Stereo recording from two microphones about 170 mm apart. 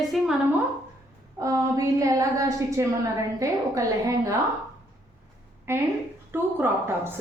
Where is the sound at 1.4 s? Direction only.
20° right (ahead or behind).